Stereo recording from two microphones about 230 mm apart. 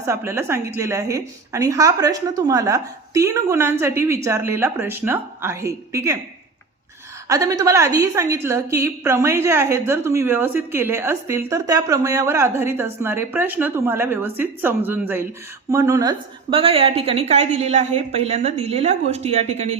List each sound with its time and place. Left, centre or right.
0.0 s a woman's voice: centre
7.3 s a woman's voice: centre